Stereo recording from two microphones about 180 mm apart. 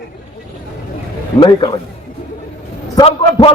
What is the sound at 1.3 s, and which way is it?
Speech, 25° left (ahead or behind).